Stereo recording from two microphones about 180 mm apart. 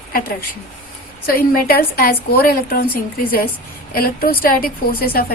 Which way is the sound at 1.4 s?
55° left (ahead or behind).